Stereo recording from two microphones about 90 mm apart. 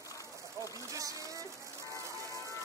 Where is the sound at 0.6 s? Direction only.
35° right (ahead or behind).